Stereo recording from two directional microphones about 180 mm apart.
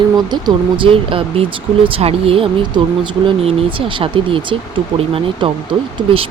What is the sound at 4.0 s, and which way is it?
Speech, 30° right (ahead or behind).